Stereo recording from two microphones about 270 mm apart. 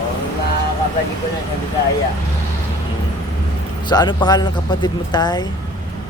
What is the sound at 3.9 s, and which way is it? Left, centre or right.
Speech, centre.